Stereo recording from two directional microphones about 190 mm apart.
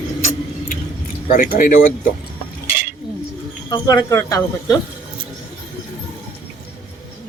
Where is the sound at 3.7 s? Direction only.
20° left (ahead or behind).